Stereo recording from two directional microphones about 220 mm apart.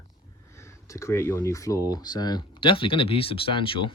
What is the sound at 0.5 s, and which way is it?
Speech, 15° left (ahead or behind).